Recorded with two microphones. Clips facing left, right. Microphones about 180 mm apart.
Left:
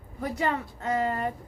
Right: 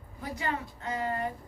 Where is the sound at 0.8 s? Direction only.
70° left (ahead or behind).